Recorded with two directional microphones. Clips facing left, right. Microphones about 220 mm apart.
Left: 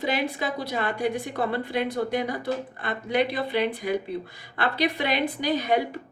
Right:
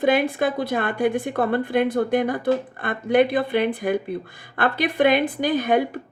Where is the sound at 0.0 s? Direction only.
50° right (ahead or behind).